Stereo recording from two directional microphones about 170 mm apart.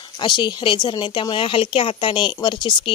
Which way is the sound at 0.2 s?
25° left (ahead or behind).